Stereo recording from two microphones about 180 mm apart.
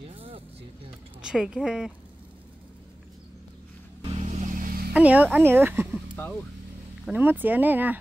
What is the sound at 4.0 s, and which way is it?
Vehicle, 35° right (ahead or behind).